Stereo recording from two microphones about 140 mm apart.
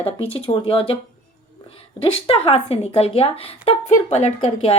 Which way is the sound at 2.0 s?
40° left (ahead or behind).